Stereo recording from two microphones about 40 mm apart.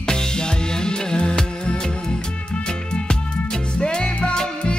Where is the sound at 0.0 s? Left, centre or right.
Centre.